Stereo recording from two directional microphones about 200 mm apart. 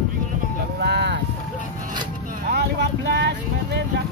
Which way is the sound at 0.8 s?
60° right (ahead or behind).